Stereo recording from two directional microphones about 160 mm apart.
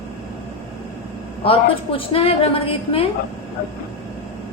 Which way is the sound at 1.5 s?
35° left (ahead or behind).